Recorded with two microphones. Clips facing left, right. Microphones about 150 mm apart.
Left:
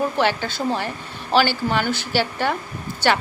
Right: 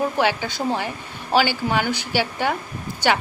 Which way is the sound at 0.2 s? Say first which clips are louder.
Even; 15° right (ahead or behind).